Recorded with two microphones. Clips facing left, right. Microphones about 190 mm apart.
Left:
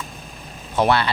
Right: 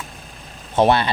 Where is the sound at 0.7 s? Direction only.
20° right (ahead or behind).